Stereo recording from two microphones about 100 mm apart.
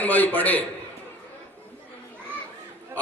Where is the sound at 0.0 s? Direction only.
15° left (ahead or behind).